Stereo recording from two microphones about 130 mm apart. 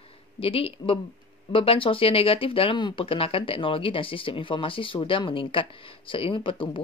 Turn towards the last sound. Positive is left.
turn(degrees=40)  # may be behind; listen again after turning